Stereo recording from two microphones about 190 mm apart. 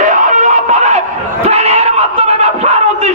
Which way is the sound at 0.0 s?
40° right (ahead or behind).